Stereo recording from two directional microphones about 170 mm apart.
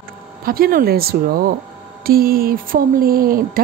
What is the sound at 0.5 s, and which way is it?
Speech, 60° right (ahead or behind).